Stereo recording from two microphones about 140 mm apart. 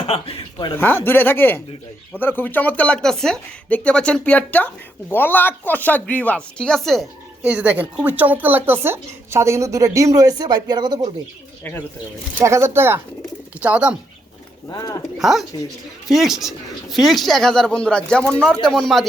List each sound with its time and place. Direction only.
0.1 s a sound: 40° left (ahead or behind)
0.8 s speech: 15° left (ahead or behind)
7.4 s speech: 10° right (ahead or behind); by 11.1 s 30° right (ahead or behind)
12.4 s speech: 20° right (ahead or behind)
14.7 s speech: 25° left (ahead or behind)
15.2 s speech: centre (ahead or behind)